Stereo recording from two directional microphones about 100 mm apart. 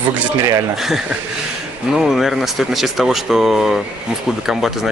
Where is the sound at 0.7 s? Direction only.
5° right (ahead or behind).